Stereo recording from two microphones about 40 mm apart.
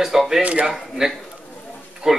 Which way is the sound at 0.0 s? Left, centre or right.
Centre.